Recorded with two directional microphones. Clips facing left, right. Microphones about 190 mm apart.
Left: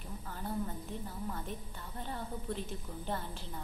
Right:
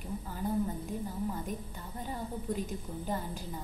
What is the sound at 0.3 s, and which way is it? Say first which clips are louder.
A woman's voice: right 5 dB; 10° right (ahead or behind).